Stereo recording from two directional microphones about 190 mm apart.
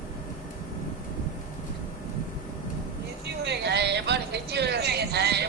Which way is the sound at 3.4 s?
60° right (ahead or behind).